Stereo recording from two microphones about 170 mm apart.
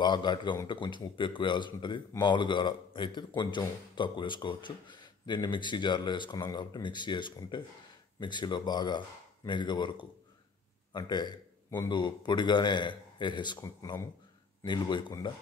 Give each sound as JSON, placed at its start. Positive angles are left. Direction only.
{"t": 0.0, "sound": "a man's voice", "side_deg": 25}
{"t": 14.6, "sound": "speech", "side_deg": 25}